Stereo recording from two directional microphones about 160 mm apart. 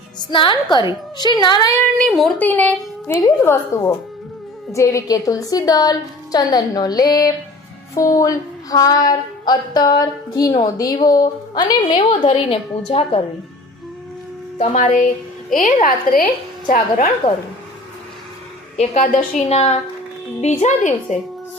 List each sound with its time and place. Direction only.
0.3 s a woman's voice: 30° left (ahead or behind)
2.0 s a woman's voice: centre (ahead or behind); by 13.2 s 35° left (ahead or behind)
14.6 s a woman's voice: 45° left (ahead or behind)
15.5 s a woman's voice: 55° left (ahead or behind)
18.8 s a woman's voice: 50° left (ahead or behind)
19.5 s a woman's voice: 40° left (ahead or behind)